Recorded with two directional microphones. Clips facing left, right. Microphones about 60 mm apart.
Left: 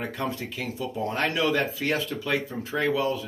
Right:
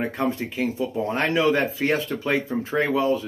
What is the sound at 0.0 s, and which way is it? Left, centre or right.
Speech, right.